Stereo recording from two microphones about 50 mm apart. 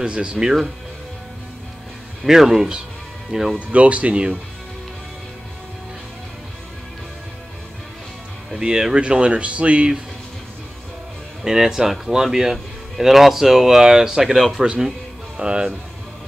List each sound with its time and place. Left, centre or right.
0.0 s speech: right
2.2 s speech: centre
3.7 s speech: right
8.5 s speech: centre
11.4 s speech: centre